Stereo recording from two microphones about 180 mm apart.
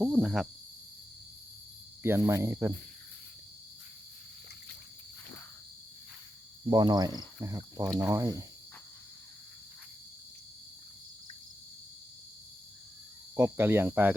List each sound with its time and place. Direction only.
0.0 s speech: 5° right (ahead or behind)
2.0 s speech: 15° right (ahead or behind)
6.7 s speech: 25° right (ahead or behind)
13.3 s speech: 15° right (ahead or behind)